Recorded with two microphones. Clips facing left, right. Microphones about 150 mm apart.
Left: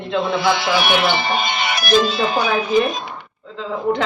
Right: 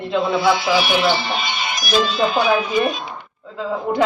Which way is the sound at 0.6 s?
60° left (ahead or behind).